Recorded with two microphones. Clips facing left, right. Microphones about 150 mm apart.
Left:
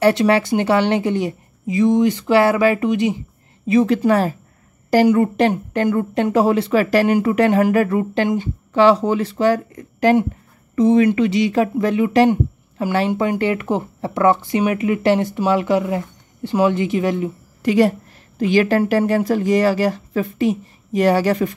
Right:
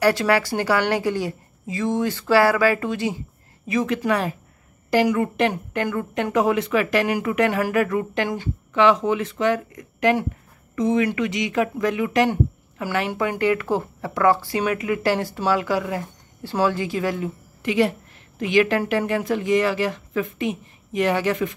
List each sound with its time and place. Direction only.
0.0 s a woman's voice: 25° left (ahead or behind)
3.6 s a woman's voice: 30° left (ahead or behind)
17.6 s a woman's voice: 40° left (ahead or behind)